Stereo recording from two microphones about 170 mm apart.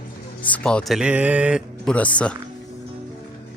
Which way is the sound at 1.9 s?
10° left (ahead or behind).